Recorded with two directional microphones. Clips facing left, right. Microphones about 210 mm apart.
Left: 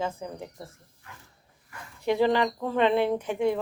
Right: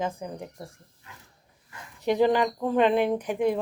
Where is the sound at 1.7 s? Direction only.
20° right (ahead or behind).